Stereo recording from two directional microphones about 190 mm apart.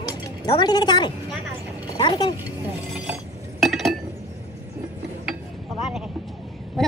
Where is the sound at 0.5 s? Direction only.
20° left (ahead or behind).